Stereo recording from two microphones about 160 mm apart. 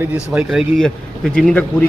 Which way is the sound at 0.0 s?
10° right (ahead or behind).